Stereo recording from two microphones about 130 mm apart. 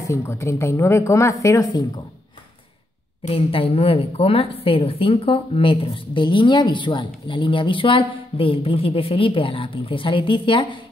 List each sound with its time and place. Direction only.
0.0 s speech: 20° left (ahead or behind)
3.3 s a woman's voice: 45° left (ahead or behind)